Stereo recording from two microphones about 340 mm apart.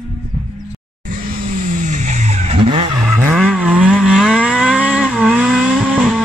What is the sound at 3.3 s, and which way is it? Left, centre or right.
Vehicle, centre.